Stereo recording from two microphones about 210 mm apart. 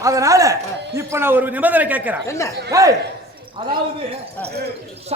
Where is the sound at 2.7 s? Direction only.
15° right (ahead or behind).